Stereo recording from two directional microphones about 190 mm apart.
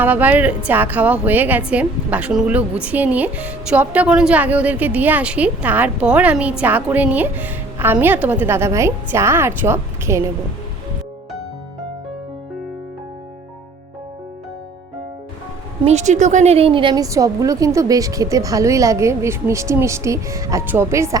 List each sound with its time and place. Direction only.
0.0 s a woman's voice: 10° right (ahead or behind)
15.8 s a woman's voice: 35° right (ahead or behind); by 21.2 s 15° right (ahead or behind)